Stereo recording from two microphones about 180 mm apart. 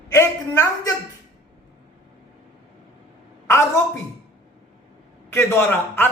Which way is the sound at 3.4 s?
15° left (ahead or behind).